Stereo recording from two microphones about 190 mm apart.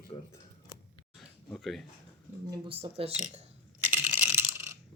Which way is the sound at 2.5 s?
25° right (ahead or behind).